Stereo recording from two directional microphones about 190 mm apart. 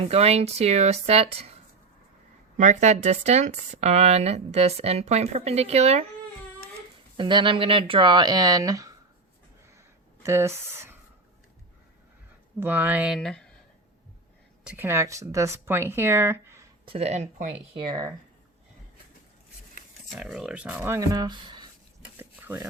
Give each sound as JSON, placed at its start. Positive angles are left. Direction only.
{"t": 0.0, "sound": "speech", "side_deg": -35}
{"t": 2.6, "sound": "speech", "side_deg": -40}
{"t": 7.2, "sound": "speech", "side_deg": -25}
{"t": 10.2, "sound": "speech", "side_deg": -15}
{"t": 12.5, "sound": "speech", "side_deg": -10}
{"t": 13.1, "sound": "speech", "side_deg": 5}
{"t": 14.6, "sound": "speech", "side_deg": -10}
{"t": 16.8, "sound": "speech", "side_deg": -30}
{"t": 17.8, "sound": "speech", "side_deg": -20}
{"t": 20.1, "sound": "speech", "side_deg": 0}
{"t": 22.2, "sound": "a sound", "side_deg": -10}